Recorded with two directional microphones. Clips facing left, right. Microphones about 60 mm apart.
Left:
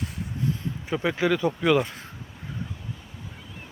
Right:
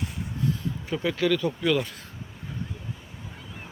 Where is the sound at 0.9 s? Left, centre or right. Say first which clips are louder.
Left 1 dB; left.